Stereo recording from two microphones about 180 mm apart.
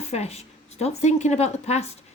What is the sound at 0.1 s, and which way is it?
A woman's voice, 35° left (ahead or behind).